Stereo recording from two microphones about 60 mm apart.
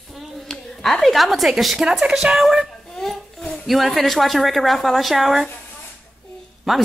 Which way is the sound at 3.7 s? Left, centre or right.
Centre.